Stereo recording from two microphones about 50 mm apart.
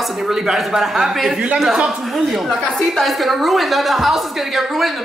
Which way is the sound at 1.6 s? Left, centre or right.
Centre.